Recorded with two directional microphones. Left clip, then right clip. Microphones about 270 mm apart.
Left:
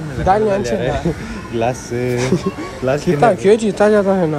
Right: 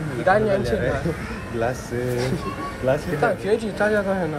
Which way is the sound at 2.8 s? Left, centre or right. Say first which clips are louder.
Left 7 dB; left.